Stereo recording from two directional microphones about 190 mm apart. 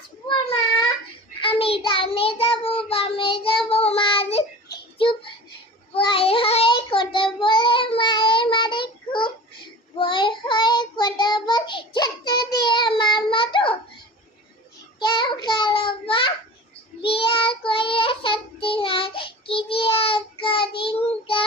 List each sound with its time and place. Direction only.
1.4 s child singing: 30° left (ahead or behind)
4.9 s a sound: 25° left (ahead or behind)
5.9 s child singing: 30° left (ahead or behind)
14.9 s child singing: 25° left (ahead or behind)